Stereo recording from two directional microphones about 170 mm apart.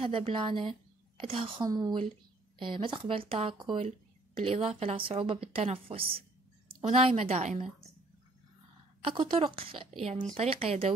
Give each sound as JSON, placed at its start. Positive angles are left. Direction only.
{"t": 0.0, "sound": "speech", "side_deg": -30}
{"t": 9.0, "sound": "speech", "side_deg": -30}